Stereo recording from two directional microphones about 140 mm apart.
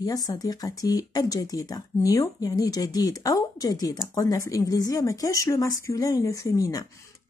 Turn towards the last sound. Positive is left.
turn(degrees=25)  # may be behind; listen again after turning